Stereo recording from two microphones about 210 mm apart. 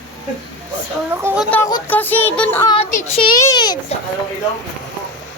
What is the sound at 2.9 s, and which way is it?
Speech, 35° left (ahead or behind).